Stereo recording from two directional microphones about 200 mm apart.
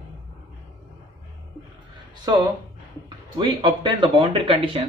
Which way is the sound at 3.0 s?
20° right (ahead or behind).